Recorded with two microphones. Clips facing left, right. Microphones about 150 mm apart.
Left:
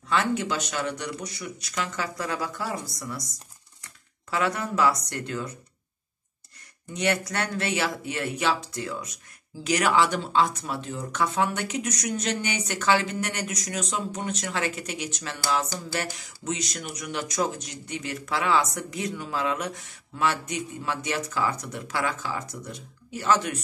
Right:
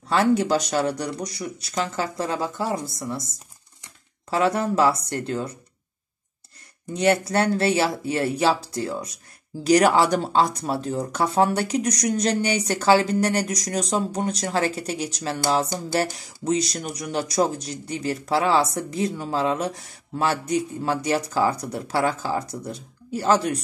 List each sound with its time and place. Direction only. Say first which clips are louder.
0.1 s speech: right 6 dB; 35° right (ahead or behind)
6.9 s speech: right 6 dB; 35° right (ahead or behind)